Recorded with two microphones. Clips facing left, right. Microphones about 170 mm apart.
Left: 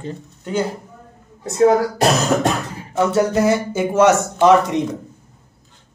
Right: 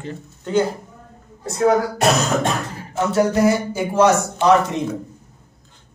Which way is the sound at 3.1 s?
25° left (ahead or behind).